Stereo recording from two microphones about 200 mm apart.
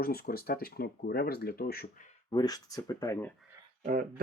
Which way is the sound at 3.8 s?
40° right (ahead or behind).